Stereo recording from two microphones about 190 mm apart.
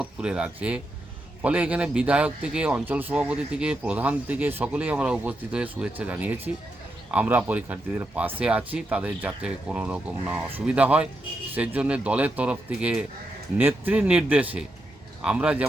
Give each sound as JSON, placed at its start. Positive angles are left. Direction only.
{"t": 0.0, "sound": "a man's voice", "side_deg": -5}